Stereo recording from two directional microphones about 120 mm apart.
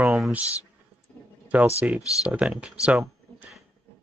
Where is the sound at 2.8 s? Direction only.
10° right (ahead or behind).